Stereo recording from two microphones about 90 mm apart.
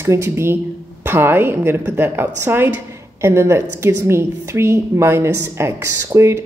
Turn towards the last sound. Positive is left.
turn(degrees=-30)  # may be behind; listen again after turning